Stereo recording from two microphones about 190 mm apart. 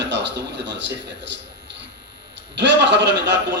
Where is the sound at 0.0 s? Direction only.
65° right (ahead or behind).